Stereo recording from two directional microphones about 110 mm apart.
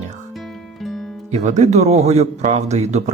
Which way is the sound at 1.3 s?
90° right.